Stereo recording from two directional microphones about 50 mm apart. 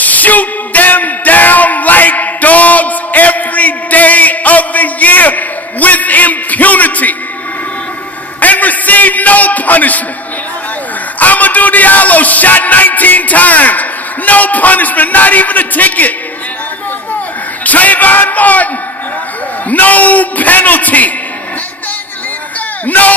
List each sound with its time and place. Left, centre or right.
0.0 s a sound: left
8.4 s a man's voice: left
11.1 s a man's voice: left
17.6 s a man's voice: left
19.7 s a man's voice: left
22.8 s speech: left